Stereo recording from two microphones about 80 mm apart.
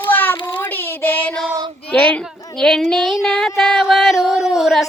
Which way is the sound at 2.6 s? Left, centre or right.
Centre.